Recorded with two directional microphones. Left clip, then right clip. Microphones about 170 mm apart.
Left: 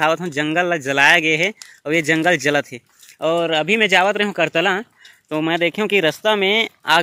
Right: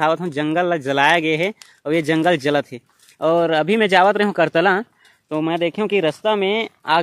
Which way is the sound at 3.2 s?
30° right (ahead or behind).